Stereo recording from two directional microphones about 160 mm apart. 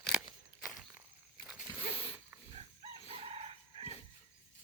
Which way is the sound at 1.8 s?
35° left (ahead or behind).